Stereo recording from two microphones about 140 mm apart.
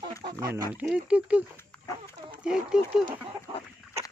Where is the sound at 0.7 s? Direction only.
10° right (ahead or behind).